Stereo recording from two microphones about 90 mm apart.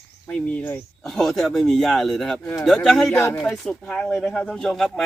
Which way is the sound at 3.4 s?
10° left (ahead or behind).